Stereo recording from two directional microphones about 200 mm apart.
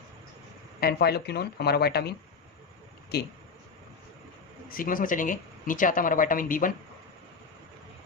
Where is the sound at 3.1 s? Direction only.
55° left (ahead or behind).